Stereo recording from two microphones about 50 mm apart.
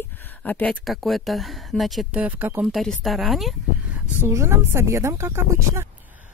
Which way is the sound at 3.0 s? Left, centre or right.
Centre.